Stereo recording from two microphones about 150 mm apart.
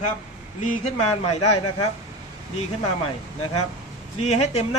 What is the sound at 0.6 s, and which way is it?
Speech, 50° left (ahead or behind).